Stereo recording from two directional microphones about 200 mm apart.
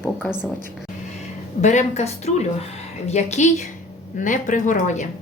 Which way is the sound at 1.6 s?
35° left (ahead or behind).